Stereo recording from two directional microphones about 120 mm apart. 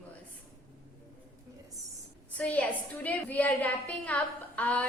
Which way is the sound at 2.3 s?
15° left (ahead or behind).